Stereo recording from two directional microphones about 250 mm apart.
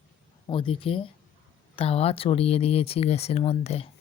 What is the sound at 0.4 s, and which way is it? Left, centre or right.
Speech, left.